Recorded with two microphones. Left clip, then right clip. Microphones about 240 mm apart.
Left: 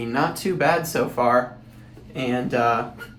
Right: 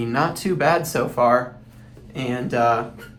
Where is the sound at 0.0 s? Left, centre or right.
Right.